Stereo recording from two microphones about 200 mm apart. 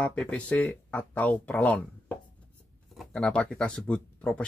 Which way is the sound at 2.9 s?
Centre (ahead or behind).